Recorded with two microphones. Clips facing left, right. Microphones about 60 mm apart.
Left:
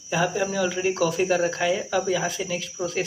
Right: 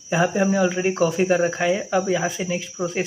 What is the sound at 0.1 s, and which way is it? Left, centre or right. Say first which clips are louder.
Speech: right 4 dB; right.